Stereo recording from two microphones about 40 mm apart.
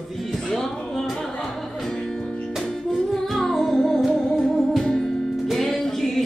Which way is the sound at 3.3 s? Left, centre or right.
Centre.